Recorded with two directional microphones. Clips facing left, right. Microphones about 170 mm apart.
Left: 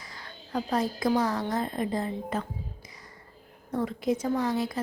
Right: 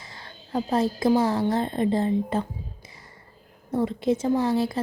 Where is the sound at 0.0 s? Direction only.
25° right (ahead or behind).